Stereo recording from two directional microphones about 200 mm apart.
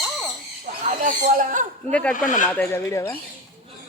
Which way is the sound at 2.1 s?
40° left (ahead or behind).